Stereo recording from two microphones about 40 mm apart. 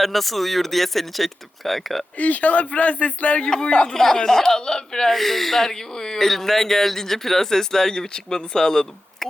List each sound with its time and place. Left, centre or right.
0.0 s speech: centre
2.1 s a man's voice: left
3.9 s speech: centre
5.1 s speech: centre